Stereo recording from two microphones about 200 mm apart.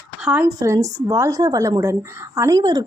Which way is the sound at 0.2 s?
5° right (ahead or behind).